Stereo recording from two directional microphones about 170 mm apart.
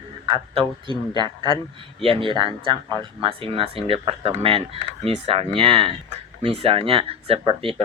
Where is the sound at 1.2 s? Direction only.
30° right (ahead or behind).